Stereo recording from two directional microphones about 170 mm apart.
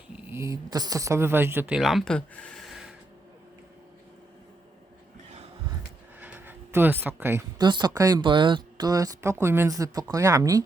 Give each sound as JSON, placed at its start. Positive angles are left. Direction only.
{"t": 0.2, "sound": "speech", "side_deg": -15}
{"t": 6.1, "sound": "a sound", "side_deg": -10}
{"t": 7.6, "sound": "speech", "side_deg": -25}